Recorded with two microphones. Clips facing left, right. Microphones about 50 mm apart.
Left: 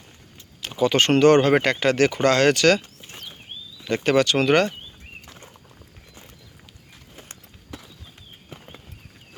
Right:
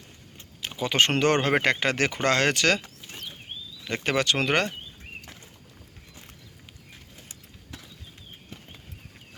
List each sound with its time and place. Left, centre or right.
0.8 s speech: centre
3.0 s a sound: centre
3.9 s speech: centre
8.5 s horse: left